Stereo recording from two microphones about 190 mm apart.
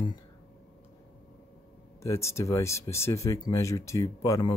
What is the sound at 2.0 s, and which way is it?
Speech, 15° left (ahead or behind).